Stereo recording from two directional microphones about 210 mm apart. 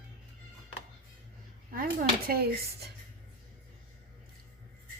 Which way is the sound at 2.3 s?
45° right (ahead or behind).